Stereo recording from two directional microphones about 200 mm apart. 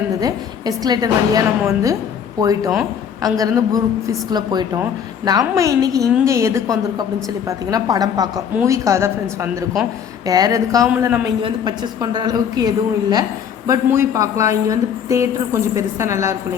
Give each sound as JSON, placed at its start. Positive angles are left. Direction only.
{"t": 0.2, "sound": "a woman's voice", "side_deg": -20}
{"t": 11.4, "sound": "a woman's voice", "side_deg": -20}